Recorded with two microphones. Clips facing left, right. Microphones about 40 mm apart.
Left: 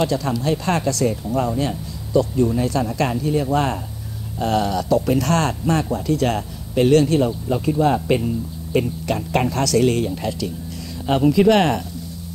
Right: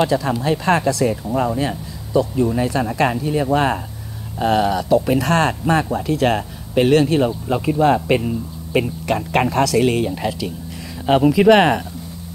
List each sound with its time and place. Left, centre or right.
0.4 s speech: centre